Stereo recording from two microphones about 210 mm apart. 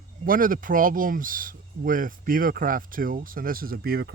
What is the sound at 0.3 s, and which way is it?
Speech, 40° right (ahead or behind).